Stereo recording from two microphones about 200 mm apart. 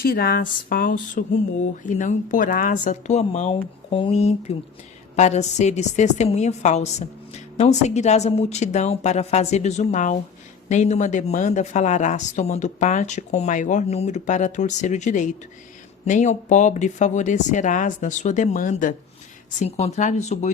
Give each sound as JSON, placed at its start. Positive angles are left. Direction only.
{"t": 0.0, "sound": "a woman's voice", "side_deg": 50}